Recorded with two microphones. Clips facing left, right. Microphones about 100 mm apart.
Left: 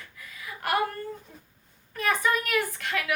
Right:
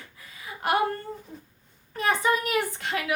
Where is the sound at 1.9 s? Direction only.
25° right (ahead or behind).